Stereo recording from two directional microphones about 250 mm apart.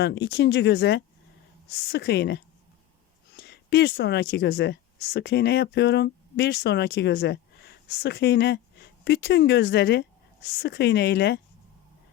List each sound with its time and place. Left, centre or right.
0.0 s a woman's voice: left